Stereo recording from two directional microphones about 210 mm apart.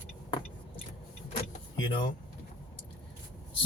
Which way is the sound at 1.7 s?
20° left (ahead or behind).